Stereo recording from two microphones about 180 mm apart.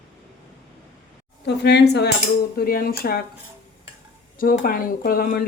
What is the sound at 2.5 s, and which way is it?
Speech, 55° left (ahead or behind).